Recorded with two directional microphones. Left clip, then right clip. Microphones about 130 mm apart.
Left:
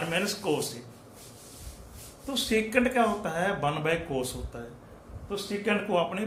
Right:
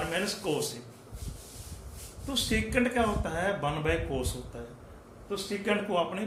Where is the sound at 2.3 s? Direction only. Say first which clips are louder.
Left 3 dB; 30° left (ahead or behind).